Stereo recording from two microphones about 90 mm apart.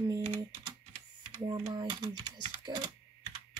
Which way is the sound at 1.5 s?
60° right (ahead or behind).